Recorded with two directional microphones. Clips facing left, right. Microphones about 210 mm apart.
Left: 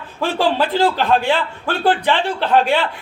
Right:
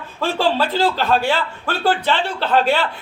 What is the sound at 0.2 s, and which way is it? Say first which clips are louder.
Speech: left 1 dB; 15° left (ahead or behind).